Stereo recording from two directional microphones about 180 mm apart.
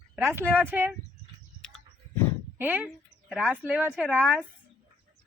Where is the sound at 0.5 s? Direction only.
10° right (ahead or behind).